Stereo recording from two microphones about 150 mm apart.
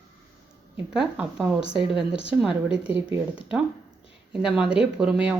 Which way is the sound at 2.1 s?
40° left (ahead or behind).